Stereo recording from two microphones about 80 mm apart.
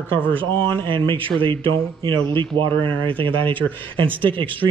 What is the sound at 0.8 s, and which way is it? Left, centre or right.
Speech, right.